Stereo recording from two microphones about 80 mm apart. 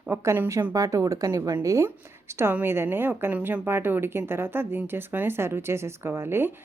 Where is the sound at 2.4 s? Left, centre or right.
Right.